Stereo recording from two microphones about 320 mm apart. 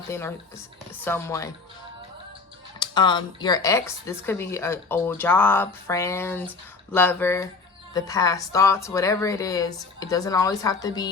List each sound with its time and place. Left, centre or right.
0.1 s speech: centre
2.7 s speech: centre